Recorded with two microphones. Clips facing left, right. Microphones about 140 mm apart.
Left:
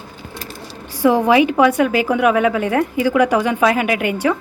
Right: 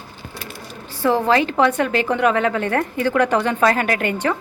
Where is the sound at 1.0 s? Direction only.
15° left (ahead or behind).